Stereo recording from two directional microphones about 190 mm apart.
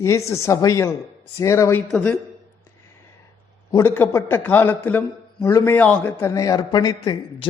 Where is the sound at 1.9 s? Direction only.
5° left (ahead or behind).